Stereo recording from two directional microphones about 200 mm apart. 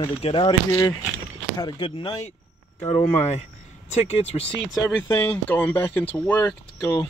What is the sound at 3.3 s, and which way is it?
Speech, 35° left (ahead or behind).